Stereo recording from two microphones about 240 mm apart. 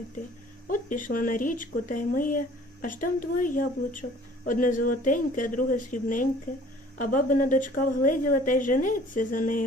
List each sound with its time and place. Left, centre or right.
0.7 s a woman's voice: left